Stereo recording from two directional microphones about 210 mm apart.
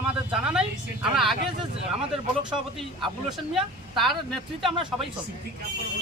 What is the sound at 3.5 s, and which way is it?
Speech, centre (ahead or behind).